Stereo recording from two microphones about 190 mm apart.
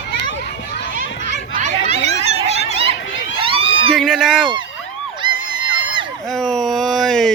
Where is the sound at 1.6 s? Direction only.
40° right (ahead or behind).